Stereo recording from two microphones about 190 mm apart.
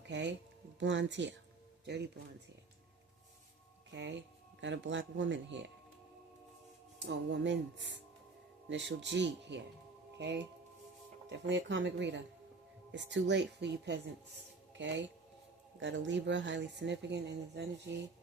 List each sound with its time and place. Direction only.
0.1 s speech: 65° right (ahead or behind)
3.9 s speech: 70° right (ahead or behind)
7.0 s speech: 65° right (ahead or behind)